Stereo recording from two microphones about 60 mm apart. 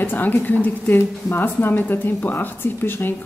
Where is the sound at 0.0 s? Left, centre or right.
Left.